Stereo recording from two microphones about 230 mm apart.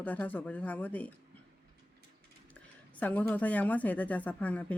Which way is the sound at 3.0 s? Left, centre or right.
Centre.